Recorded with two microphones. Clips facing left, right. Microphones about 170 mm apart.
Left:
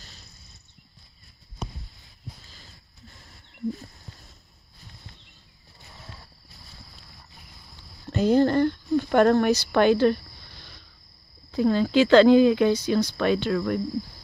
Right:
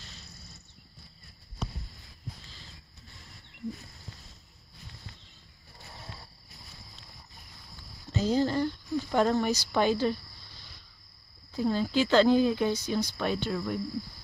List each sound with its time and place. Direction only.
8.1 s speech: 60° left (ahead or behind)
11.5 s speech: 90° left